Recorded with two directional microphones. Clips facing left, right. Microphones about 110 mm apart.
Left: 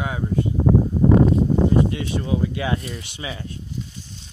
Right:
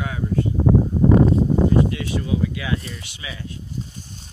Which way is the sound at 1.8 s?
30° left (ahead or behind).